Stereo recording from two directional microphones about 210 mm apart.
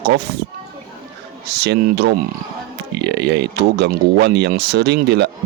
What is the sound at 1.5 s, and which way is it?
Speech, 55° right (ahead or behind).